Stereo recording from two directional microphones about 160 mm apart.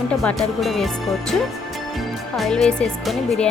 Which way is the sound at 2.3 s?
Centre (ahead or behind).